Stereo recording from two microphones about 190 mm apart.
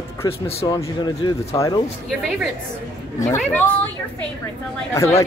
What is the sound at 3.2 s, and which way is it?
Speech, 10° left (ahead or behind).